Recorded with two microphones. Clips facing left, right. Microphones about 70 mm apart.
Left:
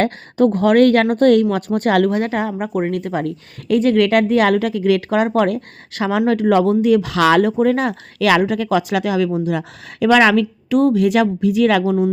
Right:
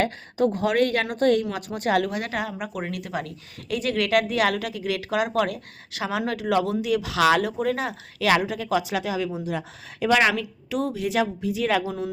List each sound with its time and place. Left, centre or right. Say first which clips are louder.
0.0 s speech: left 7 dB; left